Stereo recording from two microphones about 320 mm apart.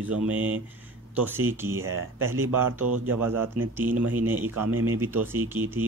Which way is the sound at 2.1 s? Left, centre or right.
Right.